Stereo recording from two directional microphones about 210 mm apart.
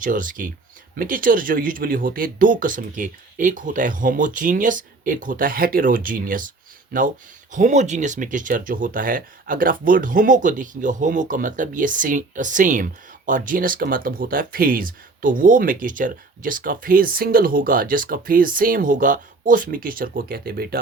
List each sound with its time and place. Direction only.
0.0 s speech: 40° right (ahead or behind)